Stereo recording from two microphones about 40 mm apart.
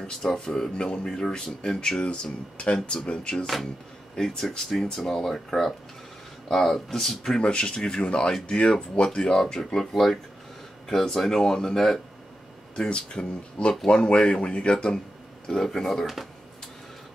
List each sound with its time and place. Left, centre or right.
0.0 s speech: centre
2.5 s speech: left
9.3 s speech: centre
12.7 s speech: left
15.4 s speech: centre